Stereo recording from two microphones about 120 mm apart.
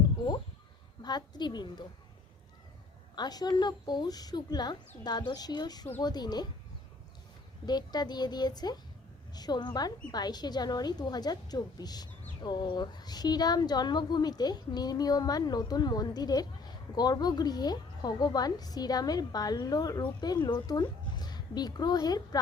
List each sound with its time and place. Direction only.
1.0 s speech: 35° left (ahead or behind)
3.2 s speech: 35° left (ahead or behind)
7.6 s a woman's voice: 35° left (ahead or behind)